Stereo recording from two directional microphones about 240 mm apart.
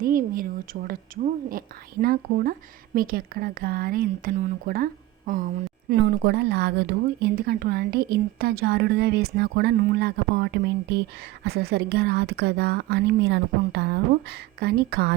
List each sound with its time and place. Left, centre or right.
0.0 s a woman's voice: right